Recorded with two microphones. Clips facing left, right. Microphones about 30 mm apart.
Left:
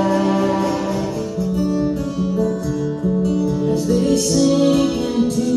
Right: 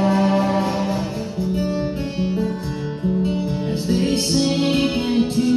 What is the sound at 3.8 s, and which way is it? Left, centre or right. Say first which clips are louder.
Music: left 1 dB; right.